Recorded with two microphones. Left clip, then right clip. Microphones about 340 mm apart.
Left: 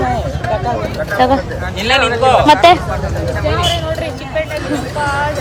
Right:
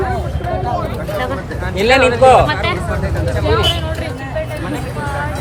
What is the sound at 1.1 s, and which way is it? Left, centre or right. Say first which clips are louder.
Speech: left 10 dB; centre.